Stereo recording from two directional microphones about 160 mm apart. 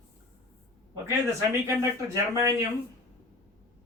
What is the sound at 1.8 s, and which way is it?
Speech, 20° right (ahead or behind).